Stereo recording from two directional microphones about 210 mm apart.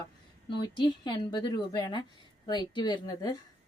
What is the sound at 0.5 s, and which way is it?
A woman's voice, 20° left (ahead or behind).